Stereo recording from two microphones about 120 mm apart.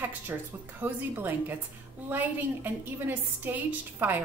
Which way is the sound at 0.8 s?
15° right (ahead or behind).